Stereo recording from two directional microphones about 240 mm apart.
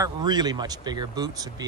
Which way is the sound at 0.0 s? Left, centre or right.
Centre.